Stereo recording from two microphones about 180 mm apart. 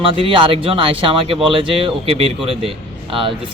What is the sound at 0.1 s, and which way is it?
Speech, 30° right (ahead or behind).